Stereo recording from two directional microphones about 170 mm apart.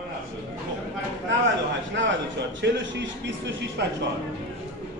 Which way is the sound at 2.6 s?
90° right.